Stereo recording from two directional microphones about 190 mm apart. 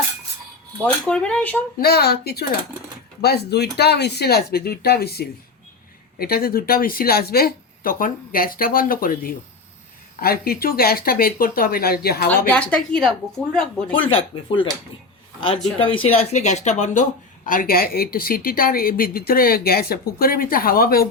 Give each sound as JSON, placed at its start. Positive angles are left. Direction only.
{"t": 0.8, "sound": "speech", "side_deg": 5}
{"t": 1.8, "sound": "speech", "side_deg": 55}
{"t": 12.5, "sound": "speech", "side_deg": 5}
{"t": 14.3, "sound": "speech", "side_deg": 25}
{"t": 15.9, "sound": "speech", "side_deg": 30}